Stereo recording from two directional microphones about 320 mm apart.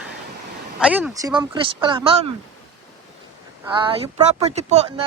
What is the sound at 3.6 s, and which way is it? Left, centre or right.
Speech, centre.